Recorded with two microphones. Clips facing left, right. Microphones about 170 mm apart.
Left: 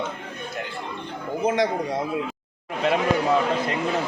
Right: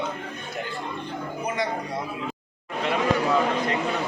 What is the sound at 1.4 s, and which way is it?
Speech, 90° left.